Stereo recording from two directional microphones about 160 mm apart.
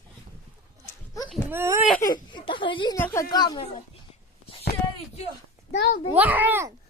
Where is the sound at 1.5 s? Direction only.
15° right (ahead or behind).